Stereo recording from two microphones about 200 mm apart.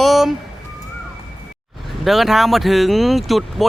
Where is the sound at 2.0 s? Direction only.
Centre (ahead or behind).